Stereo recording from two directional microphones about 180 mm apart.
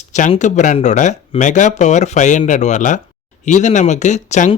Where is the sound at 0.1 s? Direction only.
45° left (ahead or behind).